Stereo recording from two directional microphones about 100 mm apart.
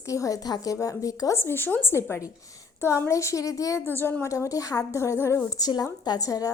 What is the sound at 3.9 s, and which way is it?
A woman's voice, 20° left (ahead or behind).